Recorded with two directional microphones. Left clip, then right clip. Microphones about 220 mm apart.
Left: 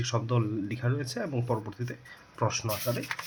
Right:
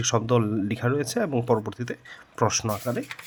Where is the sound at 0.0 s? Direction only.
60° right (ahead or behind).